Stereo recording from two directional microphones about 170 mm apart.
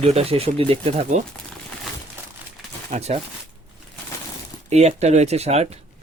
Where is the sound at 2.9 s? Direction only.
40° right (ahead or behind).